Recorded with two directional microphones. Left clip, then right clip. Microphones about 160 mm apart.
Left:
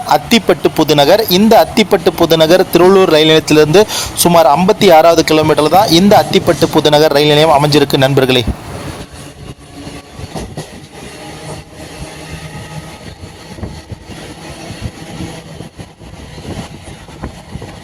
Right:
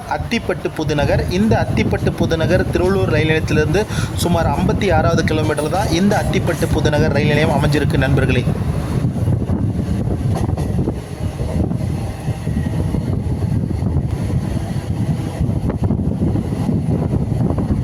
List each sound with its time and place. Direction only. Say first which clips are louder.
0.1 s speech: left 10 dB; 30° left (ahead or behind)